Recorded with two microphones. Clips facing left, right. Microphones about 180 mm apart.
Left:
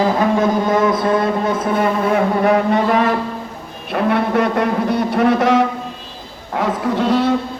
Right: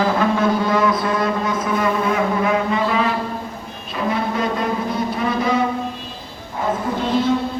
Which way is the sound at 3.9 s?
65° left (ahead or behind).